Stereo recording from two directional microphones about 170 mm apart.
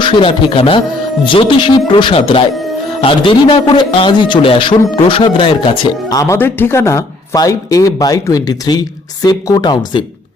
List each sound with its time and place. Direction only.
0.0 s a man's voice: 30° left (ahead or behind)